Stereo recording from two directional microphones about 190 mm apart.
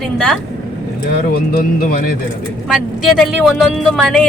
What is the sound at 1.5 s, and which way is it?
Speech, 50° left (ahead or behind).